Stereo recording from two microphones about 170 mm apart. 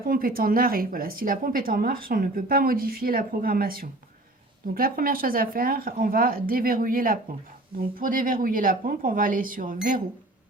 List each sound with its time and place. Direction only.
0.0 s speech: 60° right (ahead or behind)